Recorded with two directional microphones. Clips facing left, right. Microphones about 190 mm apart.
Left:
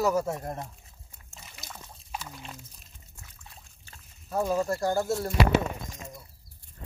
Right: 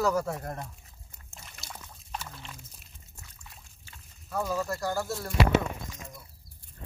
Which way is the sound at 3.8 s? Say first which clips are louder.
Left 3 dB; 30° left (ahead or behind).